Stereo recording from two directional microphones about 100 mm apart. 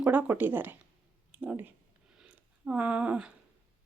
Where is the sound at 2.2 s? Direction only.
10° right (ahead or behind).